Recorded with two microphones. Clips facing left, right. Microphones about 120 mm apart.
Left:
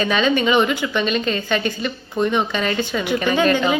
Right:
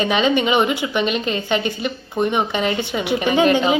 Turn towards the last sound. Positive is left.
turn(degrees=-20)  # may be behind; listen again after turning